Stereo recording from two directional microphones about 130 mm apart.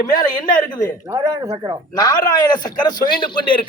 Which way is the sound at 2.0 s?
30° left (ahead or behind).